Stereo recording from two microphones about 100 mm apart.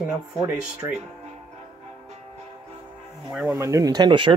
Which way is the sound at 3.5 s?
35° right (ahead or behind).